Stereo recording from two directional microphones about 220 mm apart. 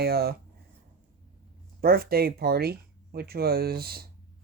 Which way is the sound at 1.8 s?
45° right (ahead or behind).